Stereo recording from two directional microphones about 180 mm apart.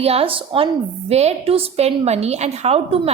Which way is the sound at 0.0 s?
35° right (ahead or behind).